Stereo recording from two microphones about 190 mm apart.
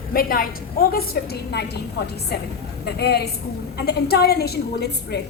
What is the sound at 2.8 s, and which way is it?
A woman's voice, 60° left (ahead or behind).